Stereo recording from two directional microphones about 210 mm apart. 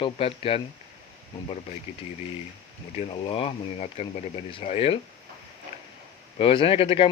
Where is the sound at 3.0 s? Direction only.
30° left (ahead or behind).